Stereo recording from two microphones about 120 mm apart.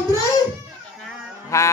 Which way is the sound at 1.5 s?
25° left (ahead or behind).